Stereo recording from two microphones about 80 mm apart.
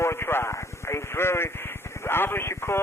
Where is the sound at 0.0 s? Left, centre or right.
Left.